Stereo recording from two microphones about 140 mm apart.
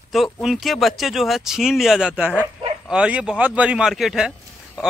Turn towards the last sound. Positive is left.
turn(degrees=-5)  # may be behind; listen again after turning